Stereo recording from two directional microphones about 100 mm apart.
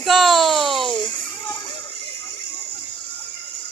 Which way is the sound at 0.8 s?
55° left (ahead or behind).